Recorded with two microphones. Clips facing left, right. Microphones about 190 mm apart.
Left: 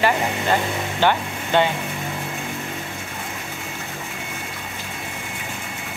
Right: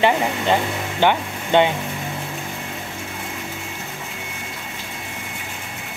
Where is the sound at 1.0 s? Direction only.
15° right (ahead or behind).